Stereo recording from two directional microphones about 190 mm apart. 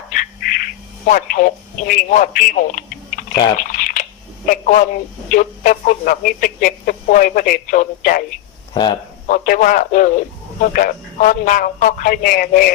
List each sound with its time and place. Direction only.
0.1 s a sound: 45° left (ahead or behind)
4.4 s speech: 45° left (ahead or behind)
8.7 s speech: 25° left (ahead or behind)
9.3 s speech: 45° left (ahead or behind)